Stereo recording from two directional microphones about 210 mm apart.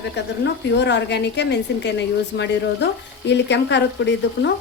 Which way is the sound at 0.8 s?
55° left (ahead or behind).